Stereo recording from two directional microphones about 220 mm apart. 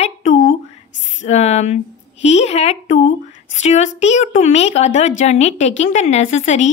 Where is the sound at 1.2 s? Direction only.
30° left (ahead or behind).